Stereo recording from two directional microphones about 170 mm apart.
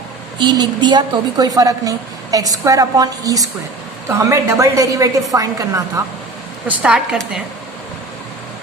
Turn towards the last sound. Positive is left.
turn(degrees=-5)  # may be behind; listen again after turning